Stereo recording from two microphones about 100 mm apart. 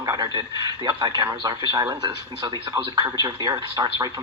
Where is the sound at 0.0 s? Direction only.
40° right (ahead or behind).